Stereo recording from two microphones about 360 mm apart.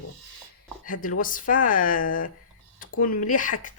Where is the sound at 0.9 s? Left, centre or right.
Left.